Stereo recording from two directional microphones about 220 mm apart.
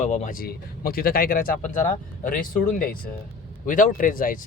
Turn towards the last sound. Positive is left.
turn(degrees=40)  # may be behind; listen again after turning